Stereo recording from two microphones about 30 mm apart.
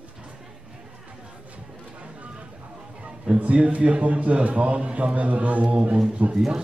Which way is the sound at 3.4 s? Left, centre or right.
Right.